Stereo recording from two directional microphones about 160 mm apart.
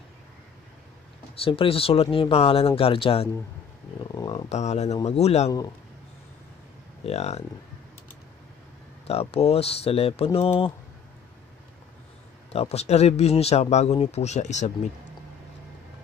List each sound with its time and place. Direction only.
1.3 s speech: 35° left (ahead or behind)
4.1 s a sound: 25° left (ahead or behind)
4.5 s speech: 45° left (ahead or behind)
7.1 s speech: 40° left (ahead or behind)
9.0 s speech: 40° left (ahead or behind)
12.5 s speech: 40° left (ahead or behind)